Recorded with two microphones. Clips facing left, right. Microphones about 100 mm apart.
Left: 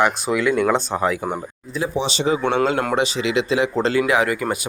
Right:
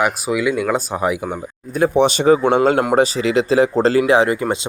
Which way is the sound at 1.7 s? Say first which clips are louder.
Right 8 dB; 55° right (ahead or behind).